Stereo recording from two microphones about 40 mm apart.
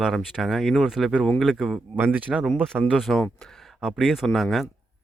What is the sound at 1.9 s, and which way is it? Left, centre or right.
Speech, right.